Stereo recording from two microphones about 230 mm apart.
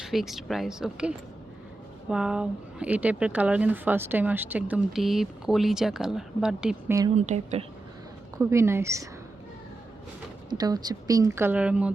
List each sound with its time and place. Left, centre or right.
0.0 s speech: centre
7.2 s a woman's voice: right
8.4 s a woman's voice: centre
10.5 s a woman's voice: centre